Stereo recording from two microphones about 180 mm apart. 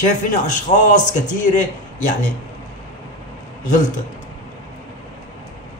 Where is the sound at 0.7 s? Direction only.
45° left (ahead or behind).